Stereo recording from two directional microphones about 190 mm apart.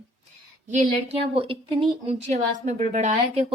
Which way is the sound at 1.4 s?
30° right (ahead or behind).